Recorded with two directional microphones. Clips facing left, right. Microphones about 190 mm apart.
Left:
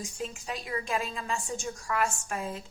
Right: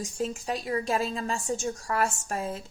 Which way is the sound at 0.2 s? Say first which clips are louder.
Right 7 dB; 35° right (ahead or behind).